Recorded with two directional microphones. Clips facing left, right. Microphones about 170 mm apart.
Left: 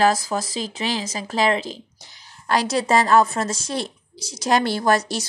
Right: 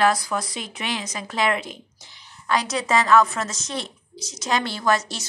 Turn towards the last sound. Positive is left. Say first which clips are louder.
# left 4 dB
turn(degrees=40)  # may be behind; listen again after turning